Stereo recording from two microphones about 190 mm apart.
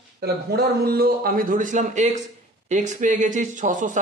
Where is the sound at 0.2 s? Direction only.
55° right (ahead or behind).